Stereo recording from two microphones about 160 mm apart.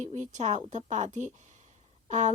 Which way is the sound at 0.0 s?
45° right (ahead or behind).